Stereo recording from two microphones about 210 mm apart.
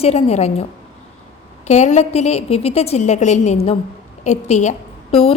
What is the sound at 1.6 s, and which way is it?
A woman's voice, 35° left (ahead or behind).